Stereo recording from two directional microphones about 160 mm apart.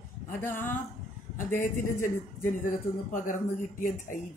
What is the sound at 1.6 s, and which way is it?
Speech, 55° left (ahead or behind).